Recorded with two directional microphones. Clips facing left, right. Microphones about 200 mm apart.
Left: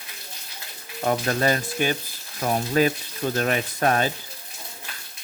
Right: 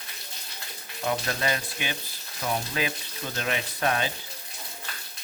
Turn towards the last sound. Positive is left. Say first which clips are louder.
# left 5 dB
turn(degrees=45)  # may be behind; listen again after turning